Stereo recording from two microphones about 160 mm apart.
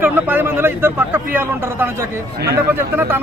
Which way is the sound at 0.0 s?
10° right (ahead or behind).